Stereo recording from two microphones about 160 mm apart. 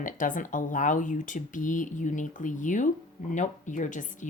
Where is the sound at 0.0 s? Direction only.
55° left (ahead or behind).